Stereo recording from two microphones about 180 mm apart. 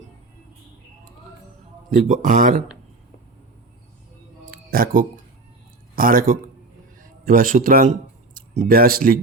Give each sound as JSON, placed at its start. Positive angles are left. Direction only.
{"t": 2.0, "sound": "speech", "side_deg": -45}
{"t": 4.5, "sound": "music", "side_deg": -55}
{"t": 6.0, "sound": "speech", "side_deg": -50}